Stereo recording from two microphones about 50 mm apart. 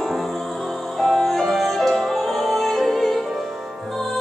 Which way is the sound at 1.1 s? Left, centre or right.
Centre.